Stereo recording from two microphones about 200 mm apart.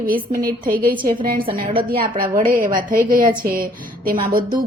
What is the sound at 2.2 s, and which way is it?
A woman's voice, 45° right (ahead or behind).